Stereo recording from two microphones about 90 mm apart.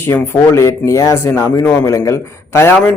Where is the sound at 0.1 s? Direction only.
30° left (ahead or behind).